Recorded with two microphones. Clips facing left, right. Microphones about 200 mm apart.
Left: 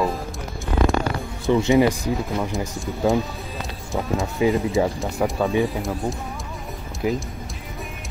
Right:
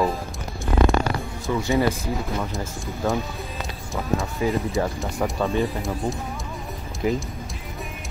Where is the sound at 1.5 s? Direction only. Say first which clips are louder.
Left 5 dB; 20° left (ahead or behind).